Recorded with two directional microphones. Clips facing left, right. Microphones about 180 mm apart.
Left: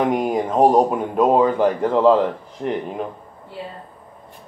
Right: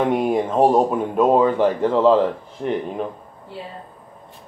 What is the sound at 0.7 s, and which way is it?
A man's voice, 10° left (ahead or behind).